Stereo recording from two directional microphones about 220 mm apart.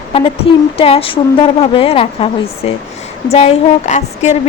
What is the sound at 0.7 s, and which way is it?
Speech, 25° left (ahead or behind).